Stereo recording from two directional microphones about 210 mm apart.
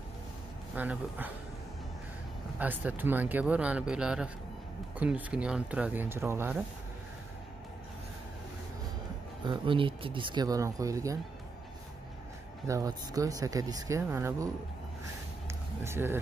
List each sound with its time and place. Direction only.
0.7 s speech: 10° right (ahead or behind)
2.6 s speech: 10° right (ahead or behind)
9.4 s speech: 20° right (ahead or behind)
12.6 s speech: 15° right (ahead or behind)
15.4 s a sound: 10° right (ahead or behind)